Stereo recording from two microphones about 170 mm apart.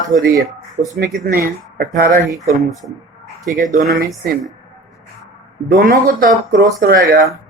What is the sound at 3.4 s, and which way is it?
Speech, 50° right (ahead or behind).